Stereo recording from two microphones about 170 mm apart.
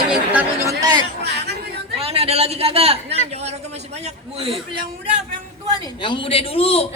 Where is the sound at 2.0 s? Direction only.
35° right (ahead or behind).